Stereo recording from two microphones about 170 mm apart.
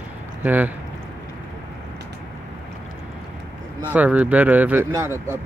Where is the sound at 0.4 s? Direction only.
10° right (ahead or behind).